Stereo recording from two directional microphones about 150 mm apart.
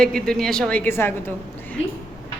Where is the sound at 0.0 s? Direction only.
5° left (ahead or behind).